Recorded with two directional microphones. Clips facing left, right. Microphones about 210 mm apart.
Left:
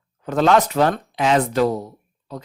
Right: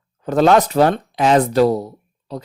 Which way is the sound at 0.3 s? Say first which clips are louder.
Right 3 dB; 40° right (ahead or behind).